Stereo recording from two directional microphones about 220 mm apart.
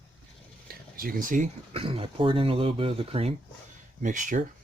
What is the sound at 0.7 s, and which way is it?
Speech, 40° right (ahead or behind).